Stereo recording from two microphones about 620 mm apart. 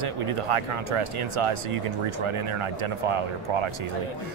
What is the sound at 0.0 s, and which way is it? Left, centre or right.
Speech, right.